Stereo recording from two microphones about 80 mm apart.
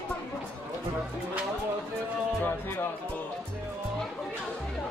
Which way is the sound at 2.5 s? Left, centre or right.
Left.